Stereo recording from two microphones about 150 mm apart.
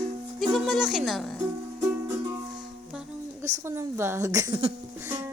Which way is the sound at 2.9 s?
5° right (ahead or behind).